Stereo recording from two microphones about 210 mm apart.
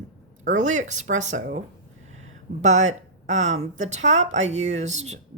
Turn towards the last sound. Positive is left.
turn(degrees=-30)  # may be behind; listen again after turning